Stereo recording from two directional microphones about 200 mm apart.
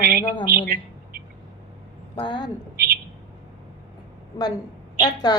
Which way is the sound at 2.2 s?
25° left (ahead or behind).